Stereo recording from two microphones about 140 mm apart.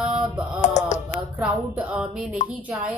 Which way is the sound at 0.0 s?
5° right (ahead or behind).